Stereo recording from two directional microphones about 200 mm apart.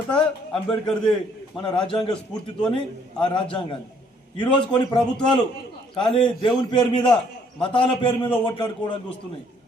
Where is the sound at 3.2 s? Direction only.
25° left (ahead or behind).